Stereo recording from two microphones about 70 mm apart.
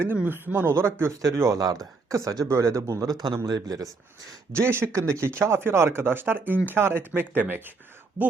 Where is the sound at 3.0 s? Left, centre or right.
Right.